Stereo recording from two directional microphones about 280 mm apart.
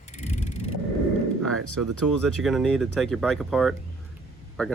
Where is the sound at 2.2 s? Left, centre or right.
Centre.